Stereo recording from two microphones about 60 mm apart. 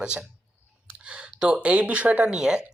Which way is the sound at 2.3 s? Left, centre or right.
Centre.